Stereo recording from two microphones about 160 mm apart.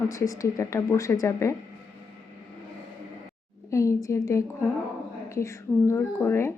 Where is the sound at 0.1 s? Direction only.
20° left (ahead or behind).